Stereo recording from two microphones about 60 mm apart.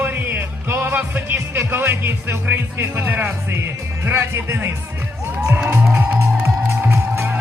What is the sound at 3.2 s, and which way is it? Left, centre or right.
Speech, right.